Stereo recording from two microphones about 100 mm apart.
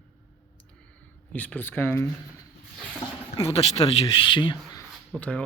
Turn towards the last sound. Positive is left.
turn(degrees=10)  # may be behind; listen again after turning